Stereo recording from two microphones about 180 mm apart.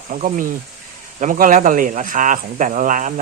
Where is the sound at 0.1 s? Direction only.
45° right (ahead or behind).